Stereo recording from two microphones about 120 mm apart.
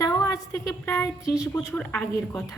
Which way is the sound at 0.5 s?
25° left (ahead or behind).